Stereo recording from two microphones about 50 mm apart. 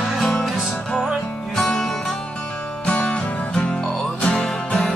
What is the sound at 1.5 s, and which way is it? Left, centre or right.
Music, centre.